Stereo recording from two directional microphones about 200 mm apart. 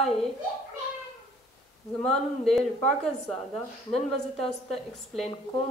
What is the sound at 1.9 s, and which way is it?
A woman's voice, centre (ahead or behind).